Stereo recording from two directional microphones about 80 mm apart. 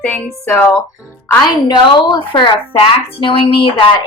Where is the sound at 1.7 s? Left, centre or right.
Left.